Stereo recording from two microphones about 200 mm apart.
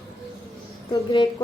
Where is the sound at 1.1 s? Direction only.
20° left (ahead or behind).